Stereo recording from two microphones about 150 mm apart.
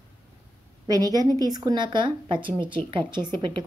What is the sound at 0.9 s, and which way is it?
A woman's voice, 25° right (ahead or behind).